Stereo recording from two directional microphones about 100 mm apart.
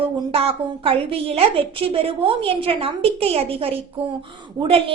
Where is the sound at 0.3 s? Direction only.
70° right (ahead or behind).